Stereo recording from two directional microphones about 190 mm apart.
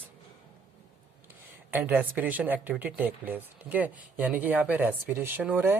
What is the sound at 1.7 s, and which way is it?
Speech, 10° right (ahead or behind).